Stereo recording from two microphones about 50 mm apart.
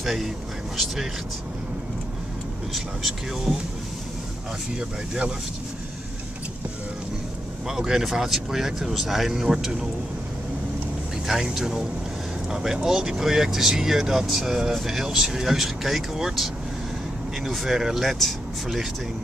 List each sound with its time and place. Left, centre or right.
0.0 s speech: centre
2.7 s speech: centre
4.7 s speech: centre
7.6 s speech: centre
11.2 s speech: centre
17.5 s speech: centre